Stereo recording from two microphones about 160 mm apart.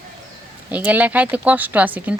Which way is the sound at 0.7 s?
10° right (ahead or behind).